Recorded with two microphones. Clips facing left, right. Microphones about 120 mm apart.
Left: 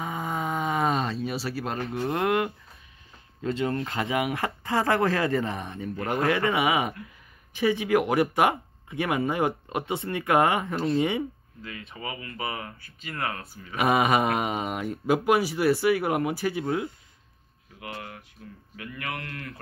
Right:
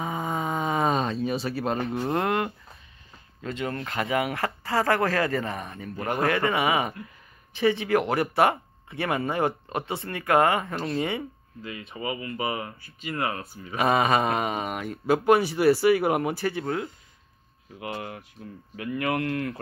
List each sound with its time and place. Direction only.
0.0 s a sound: centre (ahead or behind)
3.4 s speech: 25° left (ahead or behind)
5.9 s speech: 20° right (ahead or behind)
6.5 s speech: 10° left (ahead or behind)
11.9 s speech: 20° right (ahead or behind)
13.9 s speech: 15° left (ahead or behind)
15.1 s speech: 5° left (ahead or behind)
17.7 s speech: 20° right (ahead or behind)